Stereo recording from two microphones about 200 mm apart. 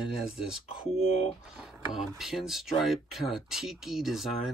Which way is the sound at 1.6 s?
Centre (ahead or behind).